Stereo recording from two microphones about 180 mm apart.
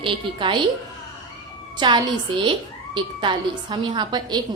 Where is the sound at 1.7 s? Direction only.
25° right (ahead or behind).